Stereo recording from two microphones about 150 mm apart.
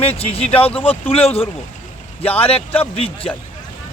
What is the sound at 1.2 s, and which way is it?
Speech, 15° left (ahead or behind).